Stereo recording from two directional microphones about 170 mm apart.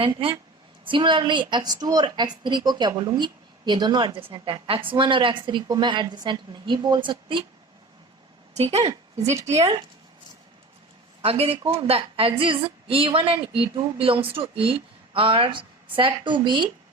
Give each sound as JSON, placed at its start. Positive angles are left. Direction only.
{"t": 0.0, "sound": "a woman's voice", "side_deg": -30}
{"t": 8.5, "sound": "a woman's voice", "side_deg": -40}
{"t": 11.2, "sound": "a woman's voice", "side_deg": -35}